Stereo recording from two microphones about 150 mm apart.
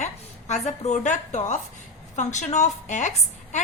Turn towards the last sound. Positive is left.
turn(degrees=50)  # may be behind; listen again after turning